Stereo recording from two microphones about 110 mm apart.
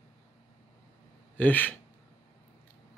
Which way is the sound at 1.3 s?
15° left (ahead or behind).